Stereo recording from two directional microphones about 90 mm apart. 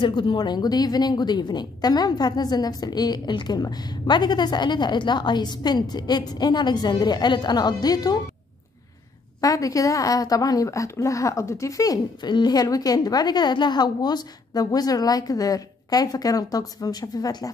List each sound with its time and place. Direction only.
0.0 s a woman's voice: 65° left (ahead or behind); by 8.2 s 45° left (ahead or behind)
9.4 s a woman's voice: 40° left (ahead or behind)